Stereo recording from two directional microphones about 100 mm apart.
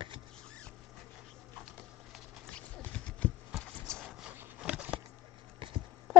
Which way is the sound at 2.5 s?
15° left (ahead or behind).